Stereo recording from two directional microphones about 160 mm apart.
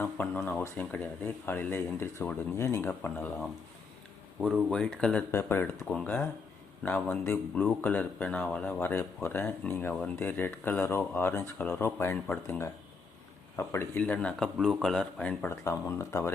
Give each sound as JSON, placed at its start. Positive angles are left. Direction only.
{"t": 0.0, "sound": "speech", "side_deg": 10}
{"t": 15.6, "sound": "speech", "side_deg": 20}